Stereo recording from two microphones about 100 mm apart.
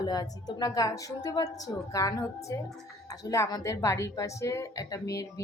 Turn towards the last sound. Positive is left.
turn(degrees=30)  # may be behind; listen again after turning